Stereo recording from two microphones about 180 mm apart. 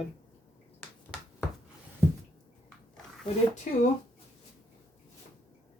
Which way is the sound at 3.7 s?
45° left (ahead or behind).